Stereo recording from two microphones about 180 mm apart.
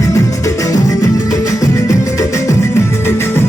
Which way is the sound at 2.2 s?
20° left (ahead or behind).